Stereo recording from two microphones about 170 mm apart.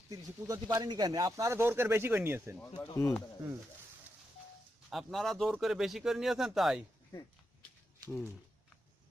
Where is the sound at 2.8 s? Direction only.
5° left (ahead or behind).